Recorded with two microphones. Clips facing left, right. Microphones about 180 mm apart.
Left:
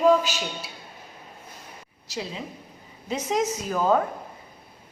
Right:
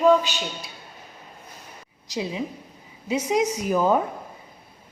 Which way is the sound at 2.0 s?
15° right (ahead or behind).